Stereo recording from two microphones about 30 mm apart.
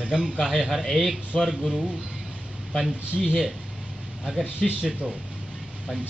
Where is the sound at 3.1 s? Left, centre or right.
Left.